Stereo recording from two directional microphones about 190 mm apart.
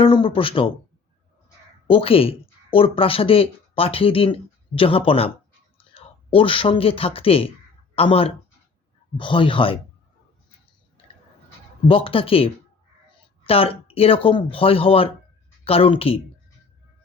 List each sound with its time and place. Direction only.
0.0 s speech: 25° left (ahead or behind)
1.9 s speech: 30° left (ahead or behind)
11.9 s speech: 30° left (ahead or behind)
13.5 s speech: 30° left (ahead or behind)